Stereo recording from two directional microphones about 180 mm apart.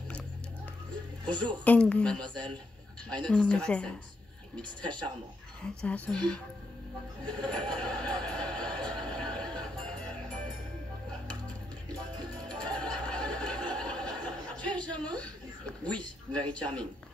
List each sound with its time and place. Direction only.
1.2 s speech: 25° right (ahead or behind)
1.6 s speech: 10° left (ahead or behind)
3.3 s speech: 5° left (ahead or behind)
5.6 s speech: 5° left (ahead or behind)
7.2 s a sound: 5° left (ahead or behind)
12.4 s a sound: 5° left (ahead or behind)
16.3 s a man's voice: 5° left (ahead or behind)